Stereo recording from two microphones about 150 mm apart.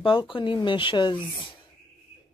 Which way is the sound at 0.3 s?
30° left (ahead or behind).